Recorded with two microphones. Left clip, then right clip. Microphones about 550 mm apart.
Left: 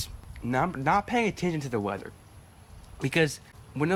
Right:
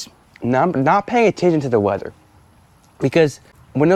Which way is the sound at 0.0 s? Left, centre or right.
Right.